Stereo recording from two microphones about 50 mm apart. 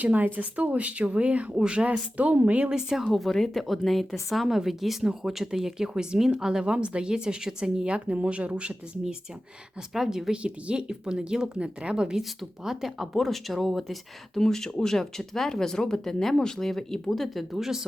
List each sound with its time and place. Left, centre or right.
0.0 s a woman's voice: right
2.6 s a woman's voice: centre
9.9 s speech: centre
10.3 s speech: right
12.4 s speech: centre